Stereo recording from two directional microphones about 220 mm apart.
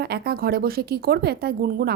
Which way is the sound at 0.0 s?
45° right (ahead or behind).